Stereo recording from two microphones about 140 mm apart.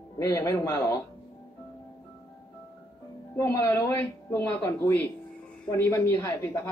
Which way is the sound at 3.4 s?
20° left (ahead or behind).